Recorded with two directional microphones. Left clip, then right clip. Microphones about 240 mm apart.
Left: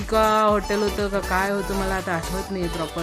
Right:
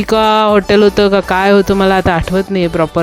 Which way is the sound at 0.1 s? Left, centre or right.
Right.